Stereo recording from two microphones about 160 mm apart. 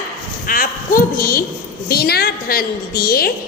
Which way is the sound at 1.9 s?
75° left (ahead or behind).